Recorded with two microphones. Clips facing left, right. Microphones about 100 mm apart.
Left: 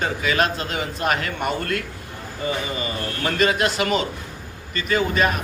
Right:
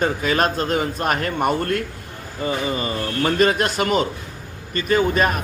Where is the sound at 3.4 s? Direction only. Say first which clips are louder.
Even; 40° right (ahead or behind).